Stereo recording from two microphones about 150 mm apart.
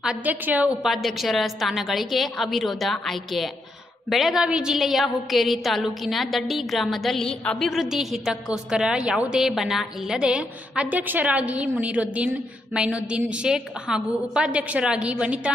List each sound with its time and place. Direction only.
0.0 s a woman's voice: 10° right (ahead or behind)